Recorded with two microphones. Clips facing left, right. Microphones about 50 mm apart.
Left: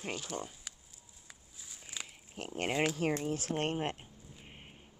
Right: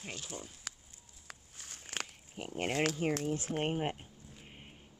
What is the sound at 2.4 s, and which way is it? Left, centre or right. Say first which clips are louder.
Speech: even; left.